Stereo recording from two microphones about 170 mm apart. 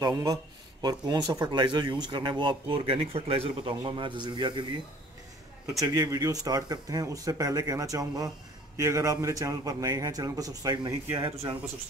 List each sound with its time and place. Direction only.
0.0 s speech: 20° right (ahead or behind)
5.8 s speech: 15° right (ahead or behind)